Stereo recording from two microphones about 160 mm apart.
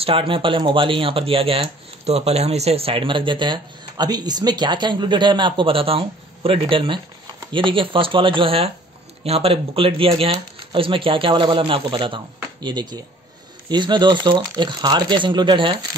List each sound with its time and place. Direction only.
0.0 s speech: 35° right (ahead or behind)